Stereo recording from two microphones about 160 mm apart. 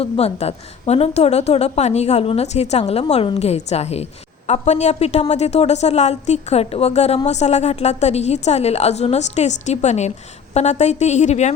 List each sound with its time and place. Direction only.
0.0 s a woman's voice: 40° left (ahead or behind)